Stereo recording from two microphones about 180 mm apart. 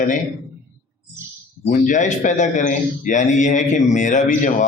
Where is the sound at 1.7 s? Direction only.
45° left (ahead or behind).